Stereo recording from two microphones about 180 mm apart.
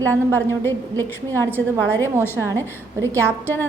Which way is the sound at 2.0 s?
15° right (ahead or behind).